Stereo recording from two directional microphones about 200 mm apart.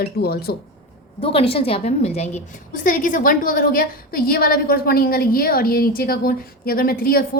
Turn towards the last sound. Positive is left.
turn(degrees=50)  # may be behind; listen again after turning